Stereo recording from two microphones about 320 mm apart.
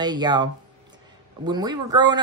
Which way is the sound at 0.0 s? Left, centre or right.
Centre.